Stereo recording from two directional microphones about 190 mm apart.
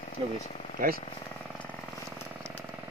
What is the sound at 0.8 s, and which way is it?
Speech, 50° right (ahead or behind).